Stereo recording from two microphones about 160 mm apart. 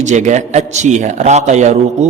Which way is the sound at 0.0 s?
50° right (ahead or behind).